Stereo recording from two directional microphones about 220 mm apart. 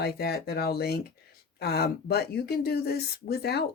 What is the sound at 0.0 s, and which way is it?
Speech, 45° left (ahead or behind).